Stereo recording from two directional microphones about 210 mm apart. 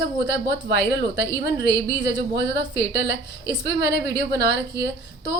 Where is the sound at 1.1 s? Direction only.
20° right (ahead or behind).